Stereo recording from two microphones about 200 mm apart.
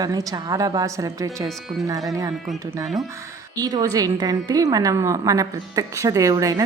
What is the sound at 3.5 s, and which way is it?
A woman's voice, 20° right (ahead or behind).